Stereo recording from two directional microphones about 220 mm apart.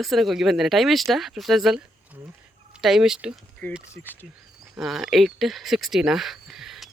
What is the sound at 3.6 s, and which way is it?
Speech, 5° left (ahead or behind).